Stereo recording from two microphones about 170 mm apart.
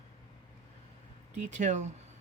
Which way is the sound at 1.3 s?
45° right (ahead or behind).